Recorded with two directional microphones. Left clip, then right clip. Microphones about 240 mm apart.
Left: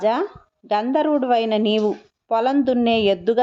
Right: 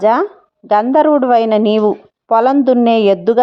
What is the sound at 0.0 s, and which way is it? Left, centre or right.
Speech, centre.